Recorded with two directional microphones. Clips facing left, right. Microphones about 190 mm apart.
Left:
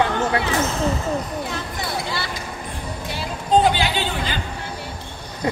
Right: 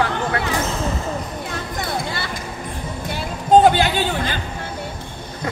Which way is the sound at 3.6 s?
50° right (ahead or behind).